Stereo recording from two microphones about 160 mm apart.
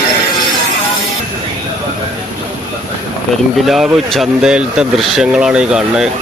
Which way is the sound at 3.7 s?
Centre (ahead or behind).